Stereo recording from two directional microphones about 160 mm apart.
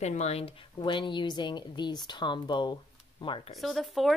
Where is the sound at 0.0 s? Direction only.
45° left (ahead or behind).